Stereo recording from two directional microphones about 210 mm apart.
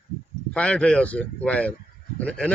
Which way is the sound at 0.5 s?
5° left (ahead or behind).